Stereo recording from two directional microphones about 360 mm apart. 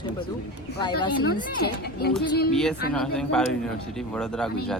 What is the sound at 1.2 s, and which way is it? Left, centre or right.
Speech, left.